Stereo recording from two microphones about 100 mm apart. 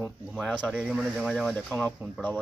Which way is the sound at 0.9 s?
Centre (ahead or behind).